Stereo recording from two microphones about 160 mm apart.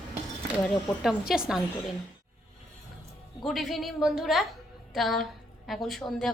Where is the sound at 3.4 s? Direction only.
Centre (ahead or behind).